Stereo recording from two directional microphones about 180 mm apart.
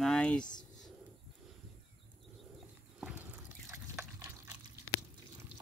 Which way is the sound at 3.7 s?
15° right (ahead or behind).